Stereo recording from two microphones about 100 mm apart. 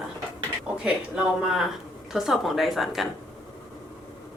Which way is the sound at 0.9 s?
5° right (ahead or behind).